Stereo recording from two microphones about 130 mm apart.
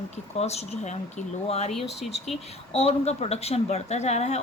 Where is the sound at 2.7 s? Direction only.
55° left (ahead or behind).